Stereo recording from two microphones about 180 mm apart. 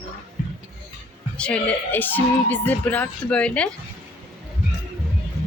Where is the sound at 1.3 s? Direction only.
5° left (ahead or behind).